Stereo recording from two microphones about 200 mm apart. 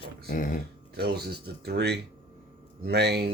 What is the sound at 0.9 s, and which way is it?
Speech, 55° right (ahead or behind).